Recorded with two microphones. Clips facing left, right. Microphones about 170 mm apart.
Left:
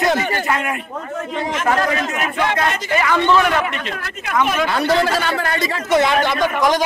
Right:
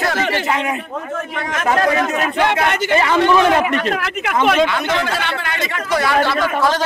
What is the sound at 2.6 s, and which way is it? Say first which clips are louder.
Speech: right 3 dB; 65° right (ahead or behind).